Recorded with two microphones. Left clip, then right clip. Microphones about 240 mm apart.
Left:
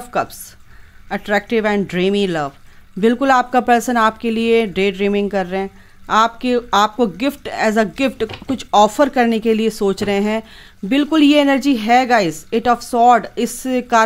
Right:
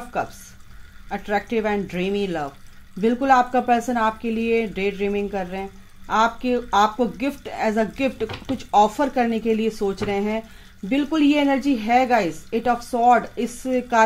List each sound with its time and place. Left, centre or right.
0.1 s speech: left